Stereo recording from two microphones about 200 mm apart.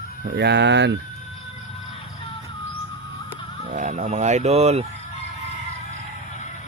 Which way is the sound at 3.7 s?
35° right (ahead or behind).